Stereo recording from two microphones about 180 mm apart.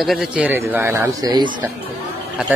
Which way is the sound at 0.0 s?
Centre (ahead or behind).